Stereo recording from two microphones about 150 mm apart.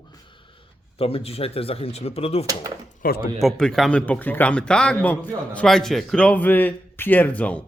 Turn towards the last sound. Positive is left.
turn(degrees=10)  # may be behind; listen again after turning